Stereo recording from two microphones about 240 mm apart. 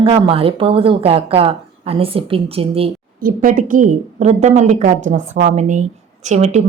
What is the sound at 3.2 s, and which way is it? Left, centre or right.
A woman's voice, right.